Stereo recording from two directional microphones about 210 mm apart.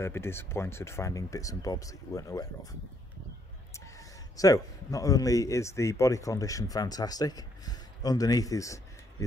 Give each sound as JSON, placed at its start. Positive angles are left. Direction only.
{"t": 0.0, "sound": "a man's voice", "side_deg": 10}